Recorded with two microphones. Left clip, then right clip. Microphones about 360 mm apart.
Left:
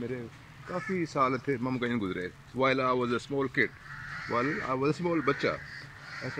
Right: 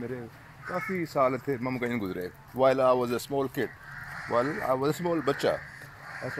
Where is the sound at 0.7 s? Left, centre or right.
Centre.